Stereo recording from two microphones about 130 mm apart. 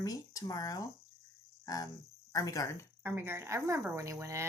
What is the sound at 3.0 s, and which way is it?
A woman's voice, 15° right (ahead or behind).